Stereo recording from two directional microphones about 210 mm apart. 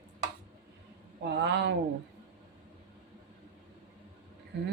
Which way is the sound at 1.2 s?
55° right (ahead or behind).